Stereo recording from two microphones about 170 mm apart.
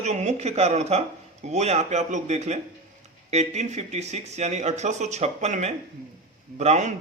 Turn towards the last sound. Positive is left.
turn(degrees=-40)  # may be behind; listen again after turning